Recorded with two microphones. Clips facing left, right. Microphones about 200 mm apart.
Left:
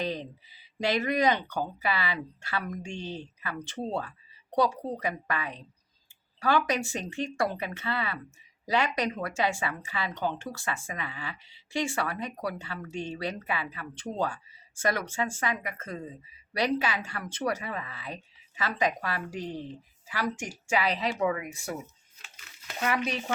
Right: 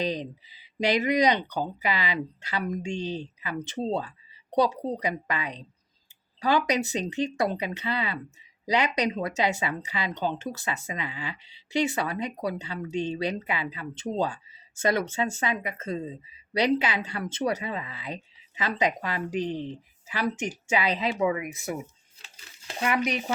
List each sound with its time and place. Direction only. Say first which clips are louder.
0.0 s speech: right 3 dB; 15° right (ahead or behind)
22.2 s a sound: right 1 dB; 30° right (ahead or behind)
22.8 s speech: right 3 dB; 15° right (ahead or behind)